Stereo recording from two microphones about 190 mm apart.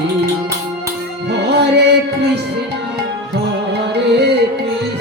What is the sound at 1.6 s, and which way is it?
Music, 65° right (ahead or behind).